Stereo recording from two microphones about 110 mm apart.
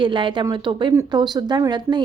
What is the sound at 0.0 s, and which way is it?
A woman's voice, 50° right (ahead or behind).